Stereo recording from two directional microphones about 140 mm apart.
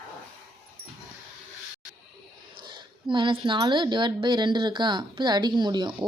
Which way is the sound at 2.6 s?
35° right (ahead or behind).